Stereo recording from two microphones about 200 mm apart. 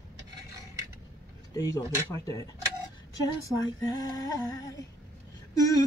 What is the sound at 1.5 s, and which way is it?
Speech, 20° left (ahead or behind).